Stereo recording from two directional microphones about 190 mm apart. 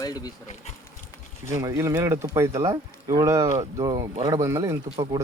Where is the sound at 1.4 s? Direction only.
15° right (ahead or behind).